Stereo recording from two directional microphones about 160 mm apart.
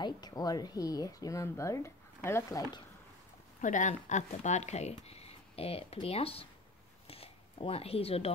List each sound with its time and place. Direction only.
0.0 s speech: 25° left (ahead or behind)
3.6 s speech: 50° left (ahead or behind)
7.1 s a sound: 35° left (ahead or behind)